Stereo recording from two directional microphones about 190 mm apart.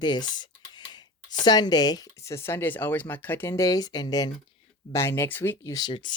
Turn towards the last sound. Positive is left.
turn(degrees=25)  # may be behind; listen again after turning